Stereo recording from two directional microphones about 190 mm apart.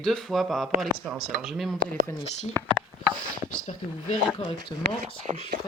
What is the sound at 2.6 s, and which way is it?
Speech, 10° left (ahead or behind).